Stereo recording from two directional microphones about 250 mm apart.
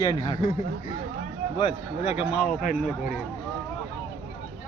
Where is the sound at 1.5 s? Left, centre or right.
Left.